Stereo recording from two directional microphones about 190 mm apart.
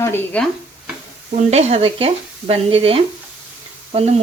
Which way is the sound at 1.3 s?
35° right (ahead or behind).